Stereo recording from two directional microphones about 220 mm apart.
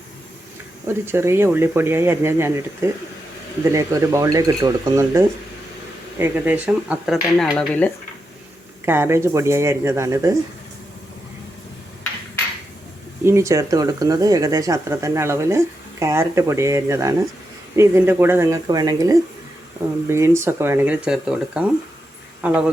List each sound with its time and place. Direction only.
1.0 s speech: 10° right (ahead or behind)
7.5 s dishes: 5° left (ahead or behind)
8.8 s speech: 10° right (ahead or behind)
13.2 s speech: 15° right (ahead or behind)